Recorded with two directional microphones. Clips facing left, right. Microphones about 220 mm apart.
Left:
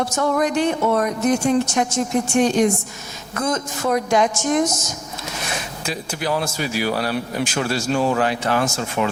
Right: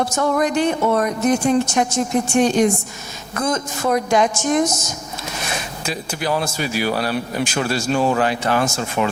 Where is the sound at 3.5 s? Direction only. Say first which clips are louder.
Right 1 dB; 30° right (ahead or behind).